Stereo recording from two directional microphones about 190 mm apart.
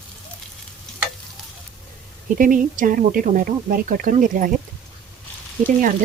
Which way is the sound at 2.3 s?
45° right (ahead or behind).